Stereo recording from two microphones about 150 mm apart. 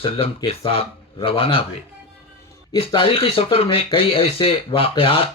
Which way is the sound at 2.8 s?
35° left (ahead or behind).